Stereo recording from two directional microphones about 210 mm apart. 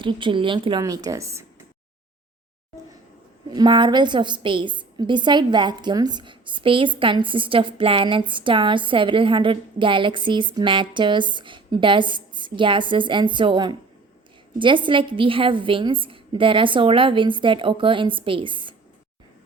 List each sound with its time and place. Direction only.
0.0 s a woman's voice: 25° right (ahead or behind)
3.5 s a woman's voice: 20° right (ahead or behind)